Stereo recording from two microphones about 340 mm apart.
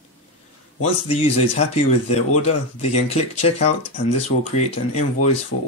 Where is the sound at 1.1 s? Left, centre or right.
Centre.